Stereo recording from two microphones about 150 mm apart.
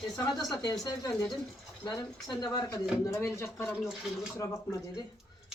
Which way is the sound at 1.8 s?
25° left (ahead or behind).